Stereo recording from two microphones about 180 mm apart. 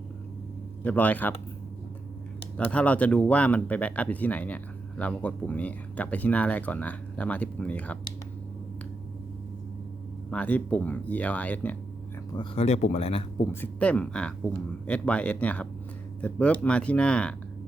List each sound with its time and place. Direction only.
0.9 s speech: 10° left (ahead or behind)
2.6 s speech: 5° left (ahead or behind)
10.2 s speech: 5° left (ahead or behind)
12.4 s speech: 35° left (ahead or behind)
13.5 s speech: 10° left (ahead or behind)